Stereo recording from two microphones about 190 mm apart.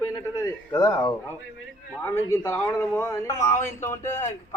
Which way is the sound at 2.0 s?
15° left (ahead or behind).